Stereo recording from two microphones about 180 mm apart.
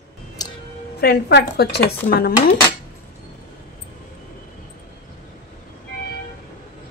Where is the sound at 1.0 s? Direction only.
65° left (ahead or behind).